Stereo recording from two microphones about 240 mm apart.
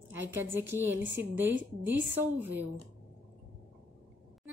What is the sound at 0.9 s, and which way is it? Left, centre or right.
Speech, right.